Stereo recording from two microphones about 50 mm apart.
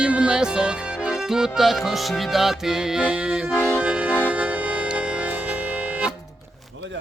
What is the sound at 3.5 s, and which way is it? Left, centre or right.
Music, left.